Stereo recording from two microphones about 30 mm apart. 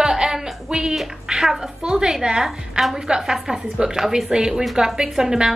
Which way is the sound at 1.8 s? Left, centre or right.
Right.